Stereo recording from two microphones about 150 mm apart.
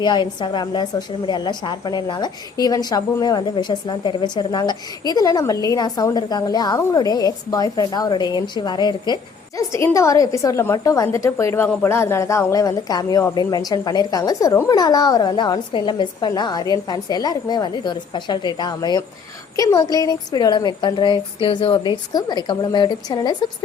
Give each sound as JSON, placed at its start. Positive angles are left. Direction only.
{"t": 0.0, "sound": "a woman's voice", "side_deg": 30}